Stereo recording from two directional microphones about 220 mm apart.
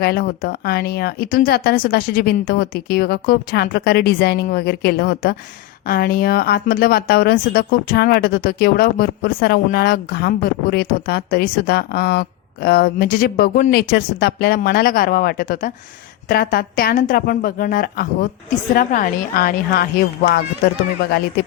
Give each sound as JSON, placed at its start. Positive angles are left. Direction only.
{"t": 0.0, "sound": "a woman's voice", "side_deg": 45}